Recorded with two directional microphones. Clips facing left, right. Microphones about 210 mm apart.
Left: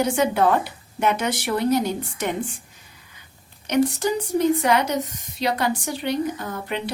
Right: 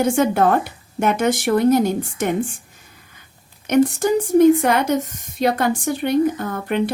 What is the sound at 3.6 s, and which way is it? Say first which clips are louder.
A woman's voice: right 4 dB; 50° right (ahead or behind).